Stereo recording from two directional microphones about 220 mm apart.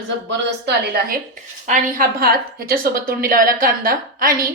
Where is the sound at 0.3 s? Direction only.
45° right (ahead or behind).